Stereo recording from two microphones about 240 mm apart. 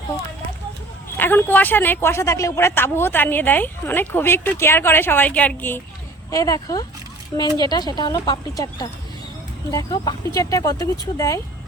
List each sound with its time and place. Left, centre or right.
1.1 s speech: centre